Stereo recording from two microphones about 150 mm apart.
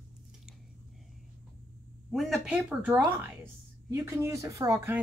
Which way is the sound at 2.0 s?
Centre (ahead or behind).